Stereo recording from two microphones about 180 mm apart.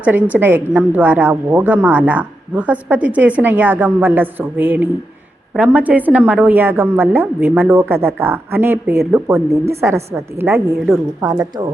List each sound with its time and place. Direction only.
0.0 s a woman's voice: 10° right (ahead or behind)